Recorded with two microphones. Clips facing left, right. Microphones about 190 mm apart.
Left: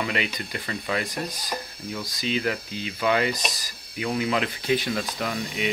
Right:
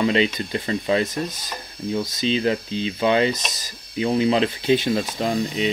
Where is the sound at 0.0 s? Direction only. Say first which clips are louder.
Right 9 dB; 25° right (ahead or behind).